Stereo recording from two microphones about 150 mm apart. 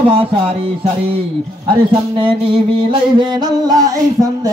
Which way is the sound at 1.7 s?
35° right (ahead or behind).